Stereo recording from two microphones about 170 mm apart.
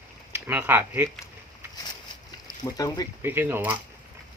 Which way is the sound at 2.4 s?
25° left (ahead or behind).